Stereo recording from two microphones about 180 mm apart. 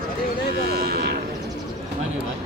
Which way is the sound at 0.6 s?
60° right (ahead or behind).